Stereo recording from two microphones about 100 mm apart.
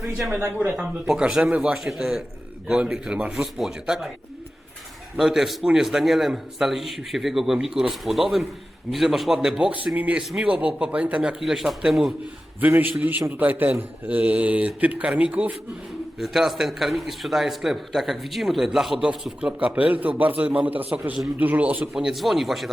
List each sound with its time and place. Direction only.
0.0 s a man's voice: centre (ahead or behind)
0.5 s a man's voice: 15° right (ahead or behind)
5.1 s a man's voice: 5° right (ahead or behind)
12.5 s a man's voice: 20° right (ahead or behind)
16.1 s a man's voice: 5° right (ahead or behind)